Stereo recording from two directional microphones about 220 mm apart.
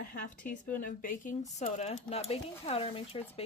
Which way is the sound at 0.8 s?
40° left (ahead or behind).